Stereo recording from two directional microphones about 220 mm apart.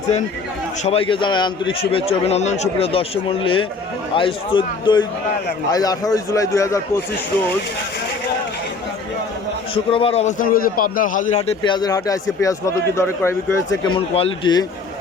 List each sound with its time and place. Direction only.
0.9 s a man's voice: 25° left (ahead or behind)
9.7 s a man's voice: 25° left (ahead or behind)
11.6 s speech: 20° left (ahead or behind)